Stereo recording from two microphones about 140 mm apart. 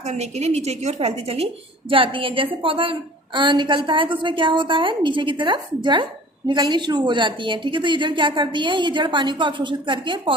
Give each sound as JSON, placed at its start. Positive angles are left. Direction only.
{"t": 0.0, "sound": "a woman's voice", "side_deg": -50}